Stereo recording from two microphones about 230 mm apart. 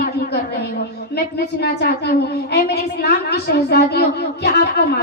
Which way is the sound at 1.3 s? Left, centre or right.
Left.